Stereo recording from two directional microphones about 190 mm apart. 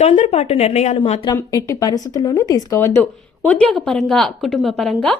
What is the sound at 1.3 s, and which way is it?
Speech, 15° left (ahead or behind).